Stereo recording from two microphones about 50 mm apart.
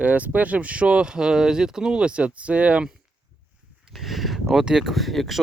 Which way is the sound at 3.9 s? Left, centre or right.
Centre.